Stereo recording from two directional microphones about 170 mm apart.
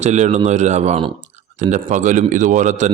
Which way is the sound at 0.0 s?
40° right (ahead or behind).